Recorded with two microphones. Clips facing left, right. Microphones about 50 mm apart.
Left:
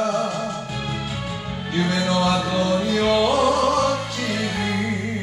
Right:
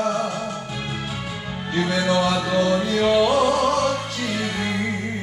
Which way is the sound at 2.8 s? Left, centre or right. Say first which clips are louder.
Right 1 dB; centre.